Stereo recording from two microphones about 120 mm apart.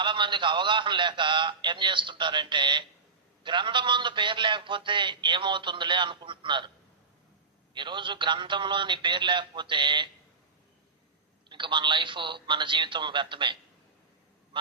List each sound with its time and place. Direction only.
0.0 s a man's voice: 40° right (ahead or behind)
7.7 s a man's voice: 40° right (ahead or behind)
11.4 s a man's voice: 40° right (ahead or behind)